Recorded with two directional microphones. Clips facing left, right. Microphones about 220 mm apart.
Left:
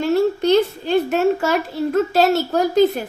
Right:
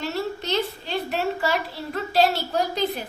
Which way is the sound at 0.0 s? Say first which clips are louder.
Left 11 dB; 50° left (ahead or behind).